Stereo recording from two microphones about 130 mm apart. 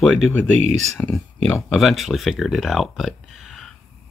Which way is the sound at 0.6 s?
60° right (ahead or behind).